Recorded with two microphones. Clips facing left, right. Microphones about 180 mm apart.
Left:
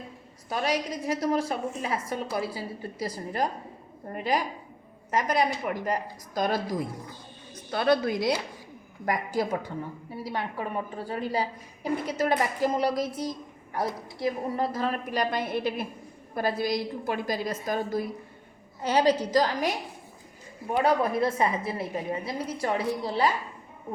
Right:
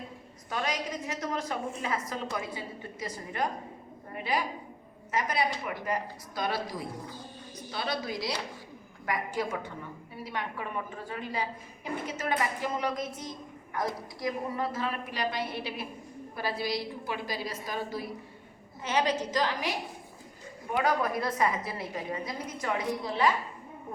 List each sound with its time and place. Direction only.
0.5 s a woman's voice: 35° left (ahead or behind); by 8.3 s 55° left (ahead or behind)
9.0 s a woman's voice: 40° left (ahead or behind)
18.8 s a woman's voice: 35° left (ahead or behind)
20.7 s a woman's voice: 30° left (ahead or behind)